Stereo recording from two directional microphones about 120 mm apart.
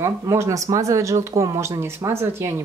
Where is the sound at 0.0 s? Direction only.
25° right (ahead or behind).